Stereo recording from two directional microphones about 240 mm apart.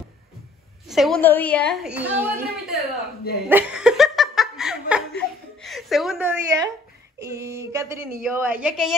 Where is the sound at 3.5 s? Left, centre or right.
Centre.